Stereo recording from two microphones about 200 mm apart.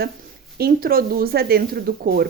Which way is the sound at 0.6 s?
50° right (ahead or behind).